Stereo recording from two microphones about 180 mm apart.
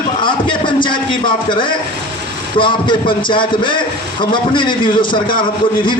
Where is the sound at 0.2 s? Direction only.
25° left (ahead or behind).